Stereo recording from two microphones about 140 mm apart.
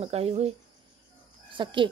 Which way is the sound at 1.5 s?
35° right (ahead or behind).